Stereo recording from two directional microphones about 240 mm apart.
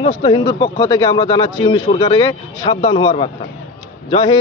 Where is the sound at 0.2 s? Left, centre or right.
Centre.